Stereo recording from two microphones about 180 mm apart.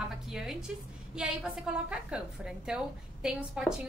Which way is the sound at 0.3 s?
5° right (ahead or behind).